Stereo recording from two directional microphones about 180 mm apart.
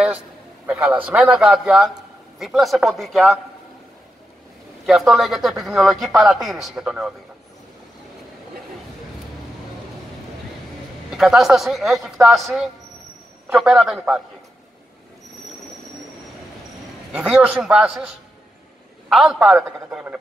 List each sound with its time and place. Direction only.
0.7 s a man's voice: 5° right (ahead or behind)
4.8 s a man's voice: centre (ahead or behind)
11.1 s a man's voice: centre (ahead or behind)
17.1 s a man's voice: 10° right (ahead or behind)